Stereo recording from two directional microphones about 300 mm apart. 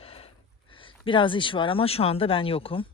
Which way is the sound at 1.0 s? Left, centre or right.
Centre.